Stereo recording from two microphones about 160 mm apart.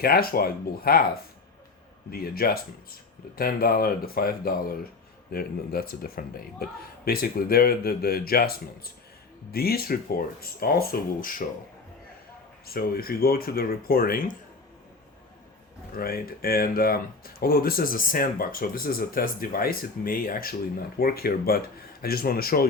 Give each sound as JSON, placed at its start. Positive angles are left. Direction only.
{"t": 0.0, "sound": "a man's voice", "side_deg": 70}
{"t": 2.0, "sound": "a man's voice", "side_deg": 70}
{"t": 12.6, "sound": "a man's voice", "side_deg": 70}
{"t": 16.0, "sound": "a man's voice", "side_deg": 70}